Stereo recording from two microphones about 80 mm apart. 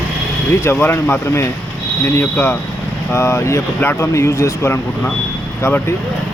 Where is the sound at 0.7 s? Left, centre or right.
Left.